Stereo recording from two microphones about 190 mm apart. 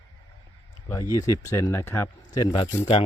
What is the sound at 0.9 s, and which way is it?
Speech, 20° left (ahead or behind).